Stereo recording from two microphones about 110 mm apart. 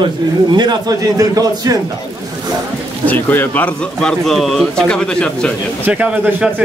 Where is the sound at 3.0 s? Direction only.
15° left (ahead or behind).